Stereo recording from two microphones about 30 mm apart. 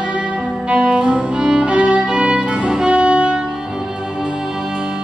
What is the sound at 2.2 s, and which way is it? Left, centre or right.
Music, right.